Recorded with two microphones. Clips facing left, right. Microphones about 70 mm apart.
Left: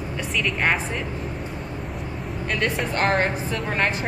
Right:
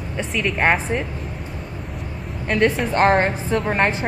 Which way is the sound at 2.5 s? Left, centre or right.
Right.